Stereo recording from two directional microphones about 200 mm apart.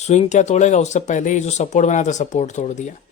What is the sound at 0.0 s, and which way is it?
Speech, 35° left (ahead or behind).